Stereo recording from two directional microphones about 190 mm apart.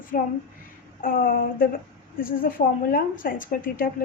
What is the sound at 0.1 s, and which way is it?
Speech, 45° left (ahead or behind).